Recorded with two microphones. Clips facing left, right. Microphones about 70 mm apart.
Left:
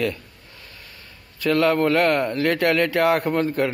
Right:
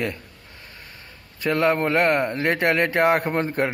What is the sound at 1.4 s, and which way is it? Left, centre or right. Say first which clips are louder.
Speech: left 2 dB; right.